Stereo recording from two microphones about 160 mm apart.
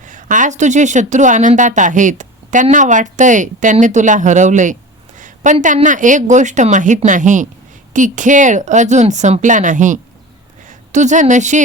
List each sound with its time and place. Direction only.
0.0 s a woman's voice: 55° right (ahead or behind)